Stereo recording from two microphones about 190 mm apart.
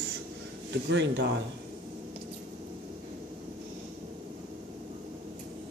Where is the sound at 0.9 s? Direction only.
65° right (ahead or behind).